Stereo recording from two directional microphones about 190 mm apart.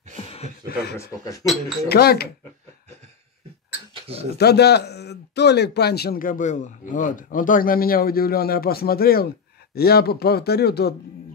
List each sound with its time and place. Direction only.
0.9 s speech: 20° left (ahead or behind)
1.9 s speech: 55° left (ahead or behind)
3.9 s a sound: 30° right (ahead or behind)
4.4 s speech: 60° left (ahead or behind)